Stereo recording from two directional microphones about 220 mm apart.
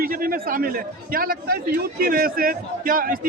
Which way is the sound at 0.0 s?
40° right (ahead or behind).